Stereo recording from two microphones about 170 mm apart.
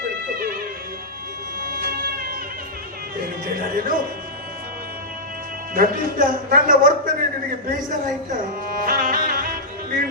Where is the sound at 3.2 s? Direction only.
60° right (ahead or behind).